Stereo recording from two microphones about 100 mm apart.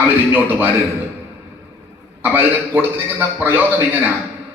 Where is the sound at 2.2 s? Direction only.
20° right (ahead or behind).